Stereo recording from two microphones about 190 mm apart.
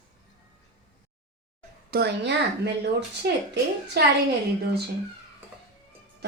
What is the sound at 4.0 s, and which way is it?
Speech, 60° right (ahead or behind).